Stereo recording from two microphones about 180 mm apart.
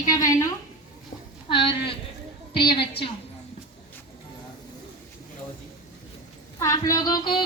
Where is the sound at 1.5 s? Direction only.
30° left (ahead or behind).